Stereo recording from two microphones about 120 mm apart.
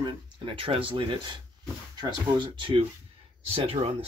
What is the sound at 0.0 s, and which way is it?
Speech, 45° right (ahead or behind).